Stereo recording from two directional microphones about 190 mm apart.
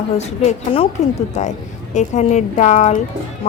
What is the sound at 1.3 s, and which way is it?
Speech, 40° left (ahead or behind).